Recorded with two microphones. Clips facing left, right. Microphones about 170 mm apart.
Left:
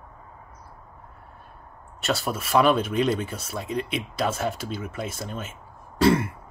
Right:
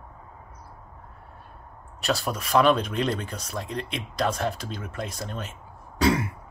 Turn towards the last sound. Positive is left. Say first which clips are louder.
# left 3 dB
turn(degrees=0)  # may be behind; listen again after turning